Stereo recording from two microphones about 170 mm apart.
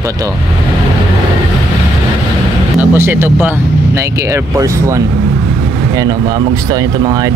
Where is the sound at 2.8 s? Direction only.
10° right (ahead or behind).